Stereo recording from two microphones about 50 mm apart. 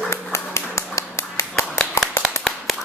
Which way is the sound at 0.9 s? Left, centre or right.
Left.